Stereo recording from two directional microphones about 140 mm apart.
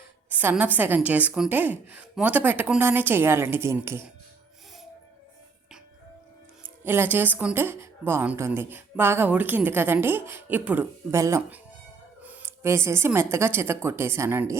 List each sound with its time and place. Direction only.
0.3 s speech: 10° right (ahead or behind)
6.8 s speech: 15° right (ahead or behind)